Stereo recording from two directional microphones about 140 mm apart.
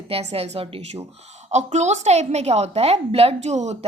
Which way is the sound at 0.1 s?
45° right (ahead or behind).